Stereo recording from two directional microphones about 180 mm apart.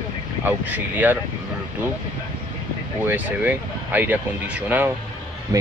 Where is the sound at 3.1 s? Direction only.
10° right (ahead or behind).